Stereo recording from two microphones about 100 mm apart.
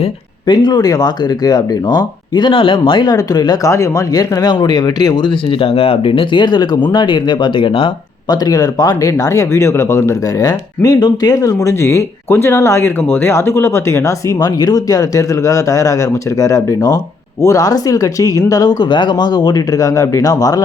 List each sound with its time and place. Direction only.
0.4 s speech: 45° left (ahead or behind)
3.7 s speech: 30° left (ahead or behind); by 7.9 s 60° left (ahead or behind)
8.3 s speech: 40° left (ahead or behind)